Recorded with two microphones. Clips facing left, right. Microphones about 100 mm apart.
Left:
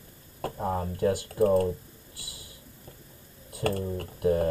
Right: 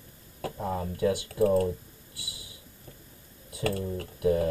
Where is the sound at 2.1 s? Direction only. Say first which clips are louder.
Right 3 dB; 50° left (ahead or behind).